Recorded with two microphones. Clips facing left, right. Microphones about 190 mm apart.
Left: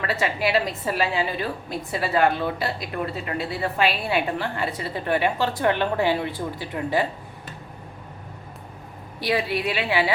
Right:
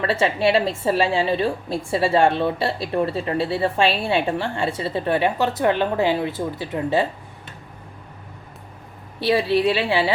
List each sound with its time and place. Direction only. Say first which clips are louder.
0.0 s a woman's voice: right 5 dB; 30° right (ahead or behind)
9.2 s a woman's voice: right 6 dB; 30° right (ahead or behind)